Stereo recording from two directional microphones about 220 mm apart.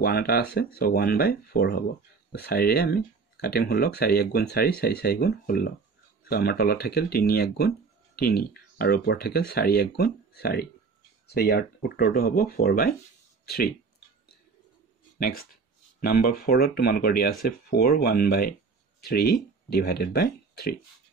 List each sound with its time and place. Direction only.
0.0 s speech: 45° left (ahead or behind)
13.5 s a sound: 45° left (ahead or behind)
15.1 s speech: 45° left (ahead or behind)